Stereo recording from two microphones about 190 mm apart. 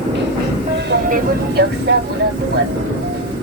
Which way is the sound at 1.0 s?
45° right (ahead or behind).